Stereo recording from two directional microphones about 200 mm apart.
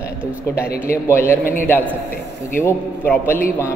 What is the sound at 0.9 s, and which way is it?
Speech, 10° left (ahead or behind).